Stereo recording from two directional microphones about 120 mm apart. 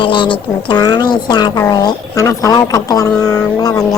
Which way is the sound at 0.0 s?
45° left (ahead or behind).